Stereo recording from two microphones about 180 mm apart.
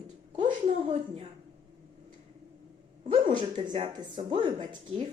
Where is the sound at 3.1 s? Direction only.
25° right (ahead or behind).